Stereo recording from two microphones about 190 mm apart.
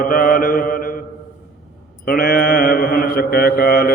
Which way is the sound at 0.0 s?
50° left (ahead or behind).